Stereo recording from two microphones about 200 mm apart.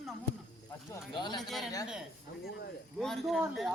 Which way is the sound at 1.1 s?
20° left (ahead or behind).